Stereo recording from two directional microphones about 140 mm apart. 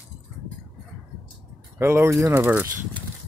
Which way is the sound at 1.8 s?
20° right (ahead or behind).